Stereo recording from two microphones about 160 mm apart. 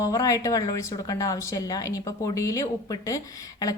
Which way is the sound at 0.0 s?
20° left (ahead or behind).